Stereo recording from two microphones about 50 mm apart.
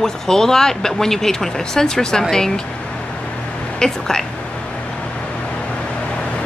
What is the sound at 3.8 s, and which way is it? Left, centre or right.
Speech, centre.